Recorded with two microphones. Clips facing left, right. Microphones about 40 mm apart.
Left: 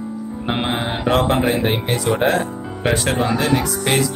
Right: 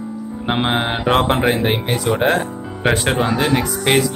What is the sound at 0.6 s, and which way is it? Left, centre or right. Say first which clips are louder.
Mantra: right 3 dB; right.